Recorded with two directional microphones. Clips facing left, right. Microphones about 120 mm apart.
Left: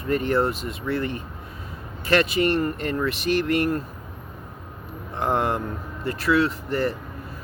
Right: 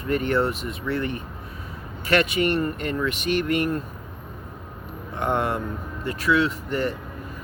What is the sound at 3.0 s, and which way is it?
Speech, 35° left (ahead or behind).